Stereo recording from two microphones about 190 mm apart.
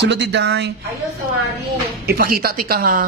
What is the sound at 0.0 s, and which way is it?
Speech, 65° right (ahead or behind).